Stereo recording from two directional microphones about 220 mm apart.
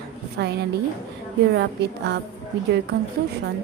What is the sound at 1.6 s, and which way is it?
Speech, 50° right (ahead or behind).